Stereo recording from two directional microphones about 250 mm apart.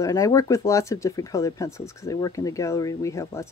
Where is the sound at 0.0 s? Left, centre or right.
Centre.